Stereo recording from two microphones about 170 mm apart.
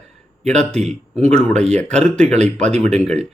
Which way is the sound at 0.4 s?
5° left (ahead or behind).